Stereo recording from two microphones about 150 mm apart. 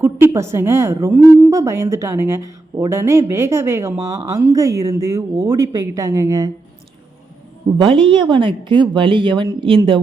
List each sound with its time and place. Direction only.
0.0 s a woman's voice: 20° right (ahead or behind)
7.8 s a woman's voice: 35° right (ahead or behind)